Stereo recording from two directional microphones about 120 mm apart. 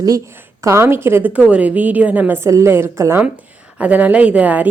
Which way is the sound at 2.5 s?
25° right (ahead or behind).